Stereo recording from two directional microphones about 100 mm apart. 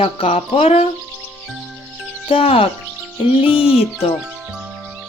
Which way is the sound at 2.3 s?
70° left (ahead or behind).